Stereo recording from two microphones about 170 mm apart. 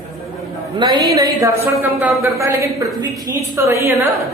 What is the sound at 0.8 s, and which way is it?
A man's voice, 25° right (ahead or behind).